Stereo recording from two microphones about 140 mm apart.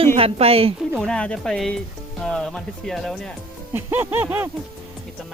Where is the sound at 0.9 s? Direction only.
5° left (ahead or behind).